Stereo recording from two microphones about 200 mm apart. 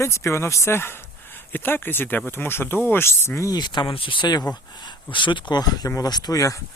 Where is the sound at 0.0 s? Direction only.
15° left (ahead or behind).